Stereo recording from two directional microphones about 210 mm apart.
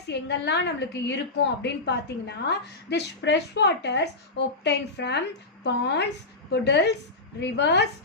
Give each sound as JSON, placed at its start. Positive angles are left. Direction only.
{"t": 0.1, "sound": "a woman's voice", "side_deg": 55}